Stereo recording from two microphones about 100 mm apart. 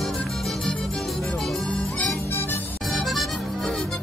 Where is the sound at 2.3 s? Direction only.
20° left (ahead or behind).